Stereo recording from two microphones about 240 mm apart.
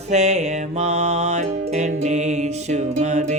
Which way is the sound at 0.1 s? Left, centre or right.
Right.